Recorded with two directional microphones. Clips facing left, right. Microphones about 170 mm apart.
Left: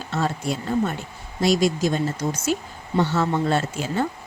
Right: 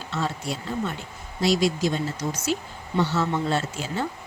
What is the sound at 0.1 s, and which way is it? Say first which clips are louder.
Speech: left 4 dB; 50° left (ahead or behind).